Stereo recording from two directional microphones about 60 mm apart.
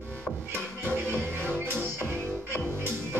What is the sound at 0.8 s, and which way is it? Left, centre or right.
Music, right.